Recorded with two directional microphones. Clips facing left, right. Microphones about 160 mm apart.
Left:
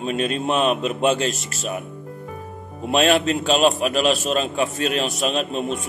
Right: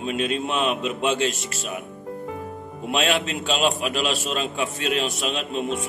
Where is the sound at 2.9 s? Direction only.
45° left (ahead or behind).